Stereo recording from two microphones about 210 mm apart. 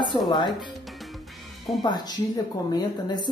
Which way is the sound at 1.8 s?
20° left (ahead or behind).